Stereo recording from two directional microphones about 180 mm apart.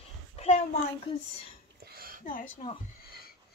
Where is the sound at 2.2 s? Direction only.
50° left (ahead or behind).